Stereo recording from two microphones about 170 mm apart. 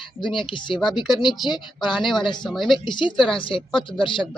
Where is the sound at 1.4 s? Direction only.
25° left (ahead or behind).